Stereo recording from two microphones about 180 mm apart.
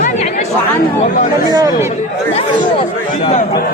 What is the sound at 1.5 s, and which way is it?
Speech, 20° right (ahead or behind).